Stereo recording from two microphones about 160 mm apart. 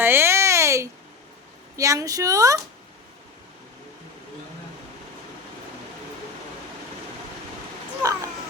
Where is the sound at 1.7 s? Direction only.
20° right (ahead or behind).